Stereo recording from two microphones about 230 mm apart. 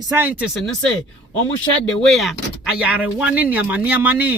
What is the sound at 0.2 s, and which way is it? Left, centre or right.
Speech, centre.